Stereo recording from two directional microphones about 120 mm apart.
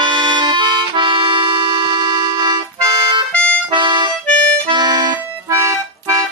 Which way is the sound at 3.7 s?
40° right (ahead or behind).